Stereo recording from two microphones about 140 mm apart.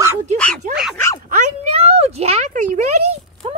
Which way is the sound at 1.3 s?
60° right (ahead or behind).